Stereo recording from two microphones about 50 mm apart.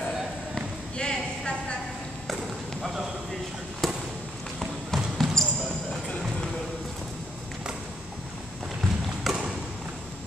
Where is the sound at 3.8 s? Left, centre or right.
Centre.